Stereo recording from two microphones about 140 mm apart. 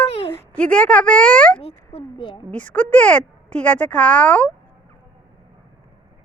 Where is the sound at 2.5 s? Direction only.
10° left (ahead or behind).